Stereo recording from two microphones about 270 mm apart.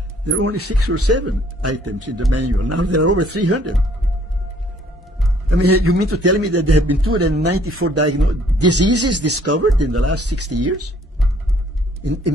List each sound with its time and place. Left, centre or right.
0.2 s a man's voice: right
5.5 s a man's voice: right